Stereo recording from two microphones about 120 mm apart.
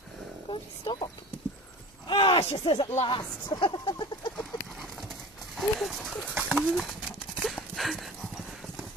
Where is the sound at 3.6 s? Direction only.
45° left (ahead or behind).